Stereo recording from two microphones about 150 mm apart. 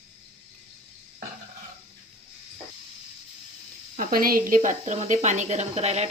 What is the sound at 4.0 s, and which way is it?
A woman's voice, 75° right (ahead or behind).